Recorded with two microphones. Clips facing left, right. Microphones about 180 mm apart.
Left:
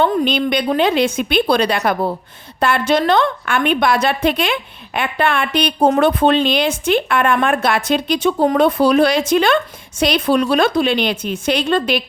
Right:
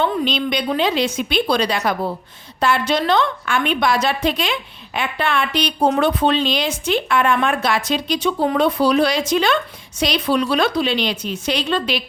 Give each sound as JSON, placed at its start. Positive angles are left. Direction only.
{"t": 0.0, "sound": "a woman's voice", "side_deg": 50}